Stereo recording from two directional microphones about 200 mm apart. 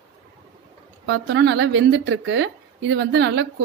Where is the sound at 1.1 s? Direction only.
65° right (ahead or behind).